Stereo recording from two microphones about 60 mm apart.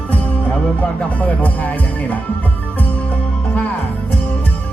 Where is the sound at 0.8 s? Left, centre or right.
Left.